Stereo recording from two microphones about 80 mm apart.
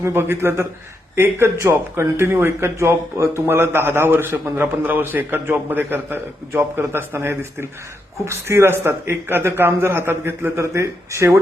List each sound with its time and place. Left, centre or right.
0.0 s a man's voice: right